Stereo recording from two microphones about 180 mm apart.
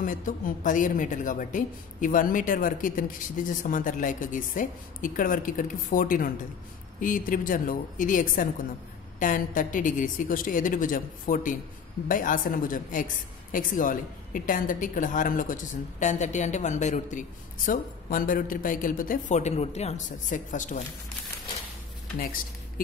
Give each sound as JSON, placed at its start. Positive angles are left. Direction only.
{"t": 0.0, "sound": "a woman's voice", "side_deg": 45}